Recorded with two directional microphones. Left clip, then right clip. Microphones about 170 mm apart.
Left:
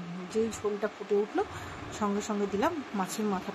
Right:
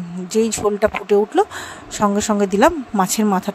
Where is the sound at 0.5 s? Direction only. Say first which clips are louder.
Right 15 dB; 75° right (ahead or behind).